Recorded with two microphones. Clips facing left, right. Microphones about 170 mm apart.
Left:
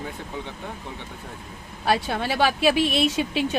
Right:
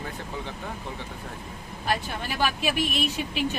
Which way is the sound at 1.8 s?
80° left.